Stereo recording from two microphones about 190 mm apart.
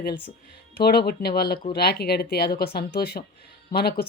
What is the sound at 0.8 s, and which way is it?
Speech, 55° left (ahead or behind).